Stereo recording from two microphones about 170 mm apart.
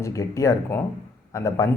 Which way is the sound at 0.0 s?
20° left (ahead or behind).